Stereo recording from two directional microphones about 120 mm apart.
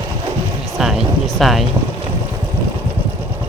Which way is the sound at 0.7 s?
5° right (ahead or behind).